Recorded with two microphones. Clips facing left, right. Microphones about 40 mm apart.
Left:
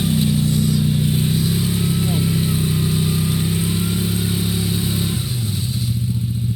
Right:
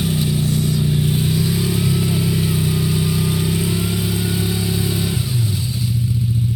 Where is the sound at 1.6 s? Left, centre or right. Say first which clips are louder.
Right 1 dB; centre.